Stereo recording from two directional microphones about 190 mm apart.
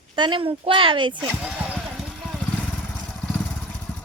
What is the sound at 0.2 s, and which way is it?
Speech, 25° right (ahead or behind).